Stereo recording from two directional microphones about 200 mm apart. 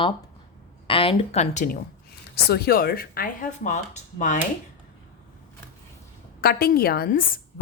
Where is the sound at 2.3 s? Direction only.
50° left (ahead or behind).